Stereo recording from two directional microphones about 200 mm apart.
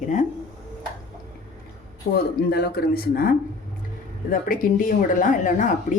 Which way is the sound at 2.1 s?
50° left (ahead or behind).